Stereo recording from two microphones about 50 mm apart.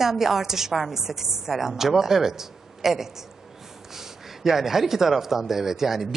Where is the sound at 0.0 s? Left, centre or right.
Centre.